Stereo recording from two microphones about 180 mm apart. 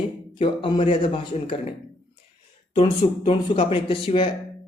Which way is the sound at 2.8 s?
30° left (ahead or behind).